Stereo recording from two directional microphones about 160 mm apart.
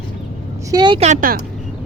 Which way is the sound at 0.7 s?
25° right (ahead or behind).